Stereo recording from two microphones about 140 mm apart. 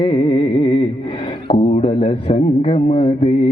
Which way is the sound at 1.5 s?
45° left (ahead or behind).